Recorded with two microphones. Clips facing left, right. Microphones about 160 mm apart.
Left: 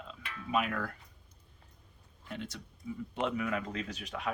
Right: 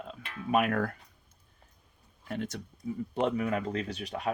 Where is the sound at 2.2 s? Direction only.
50° right (ahead or behind).